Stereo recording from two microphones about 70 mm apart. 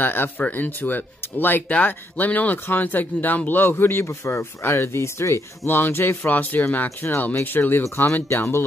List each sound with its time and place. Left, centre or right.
0.0 s speech: left
7.8 s speech: left